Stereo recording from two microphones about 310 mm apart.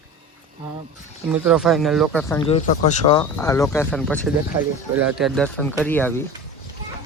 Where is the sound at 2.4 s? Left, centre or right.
Left.